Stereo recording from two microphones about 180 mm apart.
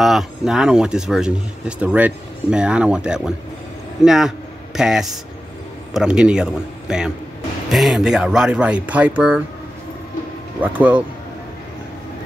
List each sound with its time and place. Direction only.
0.0 s speech: centre (ahead or behind)
10.6 s speech: 10° right (ahead or behind)